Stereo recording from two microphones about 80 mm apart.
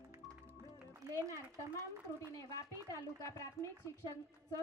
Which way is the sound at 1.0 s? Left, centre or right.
Right.